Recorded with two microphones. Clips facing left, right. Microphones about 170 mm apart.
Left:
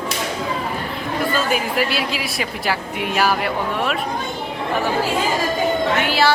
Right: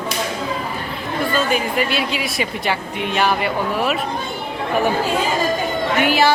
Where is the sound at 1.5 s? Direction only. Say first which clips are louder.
Right 1 dB; 5° left (ahead or behind).